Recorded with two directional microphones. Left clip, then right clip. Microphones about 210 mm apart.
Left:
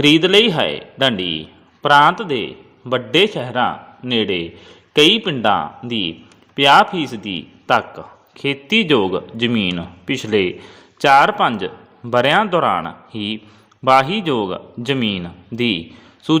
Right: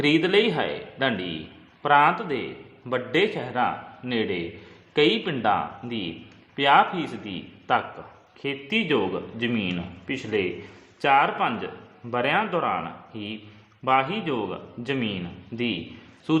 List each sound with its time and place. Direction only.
0.0 s a man's voice: 35° left (ahead or behind)